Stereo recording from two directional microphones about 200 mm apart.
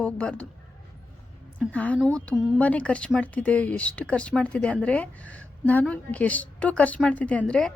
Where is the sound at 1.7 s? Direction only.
5° left (ahead or behind).